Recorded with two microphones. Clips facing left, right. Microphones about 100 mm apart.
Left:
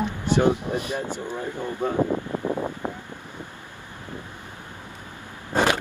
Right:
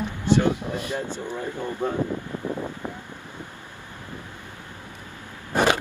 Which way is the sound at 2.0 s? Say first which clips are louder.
Left 4 dB; 30° left (ahead or behind).